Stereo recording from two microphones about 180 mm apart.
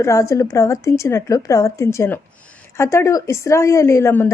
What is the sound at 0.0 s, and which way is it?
A woman's voice, 15° left (ahead or behind).